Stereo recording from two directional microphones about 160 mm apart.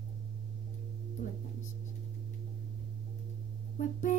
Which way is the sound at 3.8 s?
50° left (ahead or behind).